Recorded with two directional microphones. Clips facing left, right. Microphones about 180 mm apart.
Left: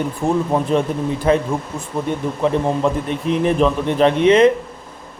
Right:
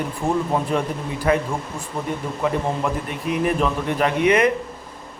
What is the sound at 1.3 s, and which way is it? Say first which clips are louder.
Speech: left 3 dB; 25° left (ahead or behind).